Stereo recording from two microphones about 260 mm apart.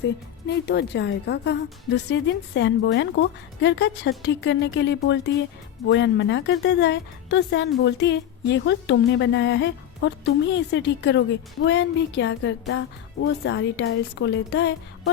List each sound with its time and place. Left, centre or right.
0.4 s a woman's voice: left